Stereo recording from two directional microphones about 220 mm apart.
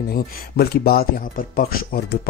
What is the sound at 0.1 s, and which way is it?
Speech, 45° left (ahead or behind).